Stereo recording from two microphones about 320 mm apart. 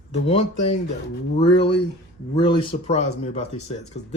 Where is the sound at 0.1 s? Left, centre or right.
Centre.